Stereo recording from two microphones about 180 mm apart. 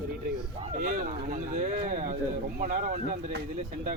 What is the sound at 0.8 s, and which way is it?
Speech, 50° right (ahead or behind).